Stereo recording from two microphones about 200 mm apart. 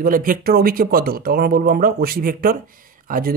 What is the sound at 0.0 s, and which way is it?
Speech, 45° right (ahead or behind).